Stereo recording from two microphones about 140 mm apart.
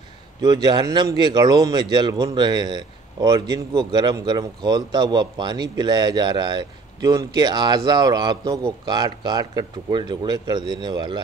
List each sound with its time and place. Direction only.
0.4 s speech: 30° right (ahead or behind)